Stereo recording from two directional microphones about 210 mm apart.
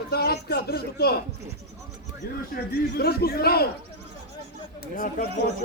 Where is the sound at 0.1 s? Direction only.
50° left (ahead or behind).